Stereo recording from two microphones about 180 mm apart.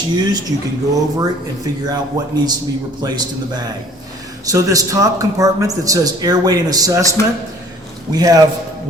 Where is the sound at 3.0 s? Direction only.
25° right (ahead or behind).